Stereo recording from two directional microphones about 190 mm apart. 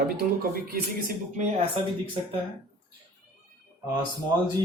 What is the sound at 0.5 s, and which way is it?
Speech, 50° right (ahead or behind).